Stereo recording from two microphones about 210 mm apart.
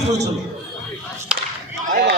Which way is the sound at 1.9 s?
40° right (ahead or behind).